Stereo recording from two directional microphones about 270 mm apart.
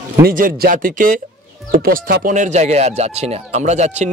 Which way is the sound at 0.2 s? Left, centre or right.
Right.